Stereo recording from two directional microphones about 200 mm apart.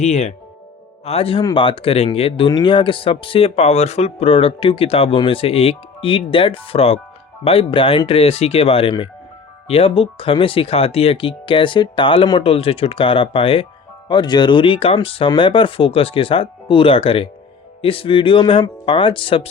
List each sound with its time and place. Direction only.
0.0 s speech: 35° left (ahead or behind)